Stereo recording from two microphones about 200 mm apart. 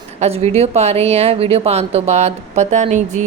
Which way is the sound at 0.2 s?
30° right (ahead or behind).